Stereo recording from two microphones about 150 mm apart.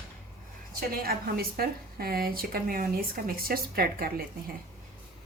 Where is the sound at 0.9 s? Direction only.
85° right.